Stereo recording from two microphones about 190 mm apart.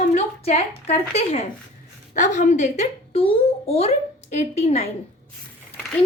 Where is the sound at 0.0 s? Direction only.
35° left (ahead or behind).